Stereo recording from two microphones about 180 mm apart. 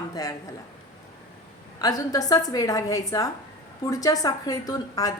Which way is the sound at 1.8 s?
20° left (ahead or behind).